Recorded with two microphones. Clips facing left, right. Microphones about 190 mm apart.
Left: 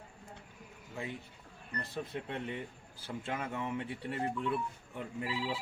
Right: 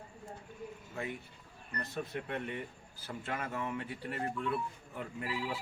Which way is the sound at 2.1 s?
20° left (ahead or behind).